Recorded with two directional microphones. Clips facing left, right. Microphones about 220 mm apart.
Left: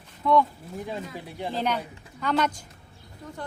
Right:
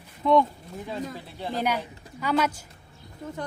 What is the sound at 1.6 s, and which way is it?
A woman's voice, 10° right (ahead or behind).